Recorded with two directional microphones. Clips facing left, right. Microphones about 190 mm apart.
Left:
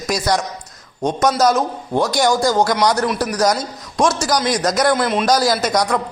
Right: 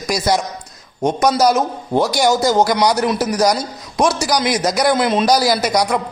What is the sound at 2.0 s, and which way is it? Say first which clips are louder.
Speech: right 1 dB; 5° right (ahead or behind).